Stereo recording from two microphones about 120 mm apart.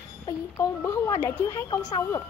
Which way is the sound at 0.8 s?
25° left (ahead or behind).